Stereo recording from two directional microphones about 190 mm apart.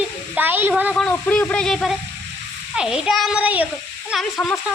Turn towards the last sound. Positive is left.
turn(degrees=0)  # may be behind; listen again after turning